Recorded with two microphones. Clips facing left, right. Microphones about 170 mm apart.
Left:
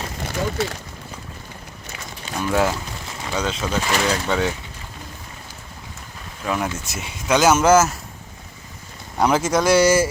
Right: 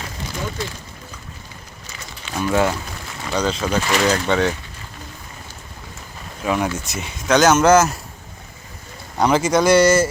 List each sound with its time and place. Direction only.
0.3 s speech: 70° left (ahead or behind)
2.4 s speech: centre (ahead or behind)
6.4 s speech: centre (ahead or behind)
9.1 s speech: centre (ahead or behind)